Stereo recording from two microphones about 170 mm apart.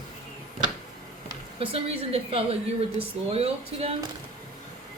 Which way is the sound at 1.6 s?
35° right (ahead or behind).